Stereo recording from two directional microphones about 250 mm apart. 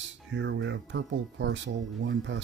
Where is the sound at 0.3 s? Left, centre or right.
Right.